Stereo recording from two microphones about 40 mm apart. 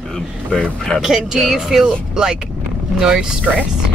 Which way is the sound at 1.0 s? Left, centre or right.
Centre.